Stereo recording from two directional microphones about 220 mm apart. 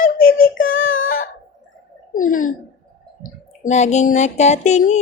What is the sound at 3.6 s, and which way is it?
A child's voice, 30° left (ahead or behind).